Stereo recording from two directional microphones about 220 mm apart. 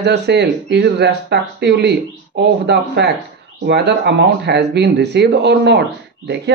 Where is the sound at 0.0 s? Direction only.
50° right (ahead or behind).